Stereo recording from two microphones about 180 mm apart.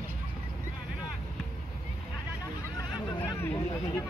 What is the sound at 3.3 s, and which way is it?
Speech, 15° left (ahead or behind).